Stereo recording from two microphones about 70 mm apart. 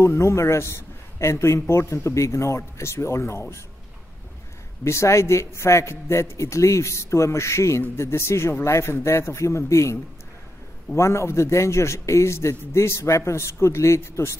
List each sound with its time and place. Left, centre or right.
0.0 s a man's voice: left
4.8 s a man's voice: left
11.0 s a man's voice: left